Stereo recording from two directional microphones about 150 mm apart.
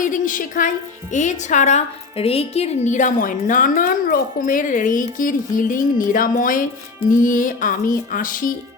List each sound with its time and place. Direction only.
0.0 s a woman's voice: 60° left (ahead or behind)